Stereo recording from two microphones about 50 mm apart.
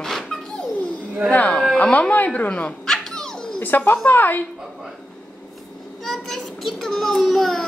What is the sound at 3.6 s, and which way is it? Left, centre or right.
Speech, left.